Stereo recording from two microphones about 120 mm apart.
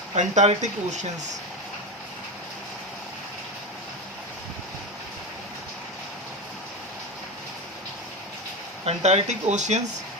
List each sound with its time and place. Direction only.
0.2 s speech: 75° right (ahead or behind)
8.8 s speech: 60° right (ahead or behind); by 9.9 s 75° right (ahead or behind)